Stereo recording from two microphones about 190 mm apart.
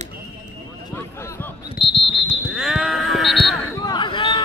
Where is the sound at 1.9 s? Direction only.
25° left (ahead or behind).